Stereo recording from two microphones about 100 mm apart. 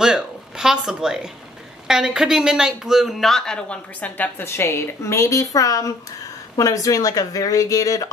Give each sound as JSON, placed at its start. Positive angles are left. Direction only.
{"t": 0.0, "sound": "speech", "side_deg": -5}